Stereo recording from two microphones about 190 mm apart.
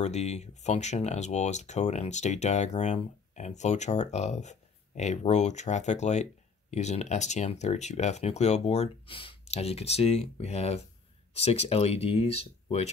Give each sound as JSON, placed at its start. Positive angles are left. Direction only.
{"t": 0.0, "sound": "speech", "side_deg": 35}